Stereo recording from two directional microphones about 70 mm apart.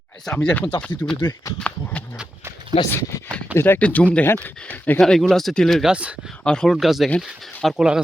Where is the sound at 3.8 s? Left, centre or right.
Left.